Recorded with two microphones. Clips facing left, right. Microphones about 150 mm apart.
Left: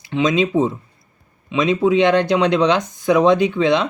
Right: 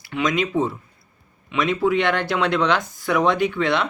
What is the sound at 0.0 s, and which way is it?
Speech, 20° left (ahead or behind).